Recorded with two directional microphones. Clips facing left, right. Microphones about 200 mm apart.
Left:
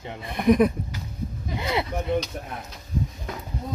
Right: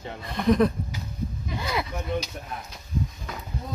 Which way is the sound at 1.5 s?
25° left (ahead or behind).